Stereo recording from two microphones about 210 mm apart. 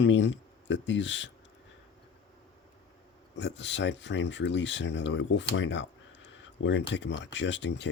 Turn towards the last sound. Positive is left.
turn(degrees=55)  # may be behind; listen again after turning